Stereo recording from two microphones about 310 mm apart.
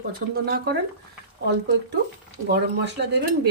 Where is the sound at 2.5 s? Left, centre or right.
Right.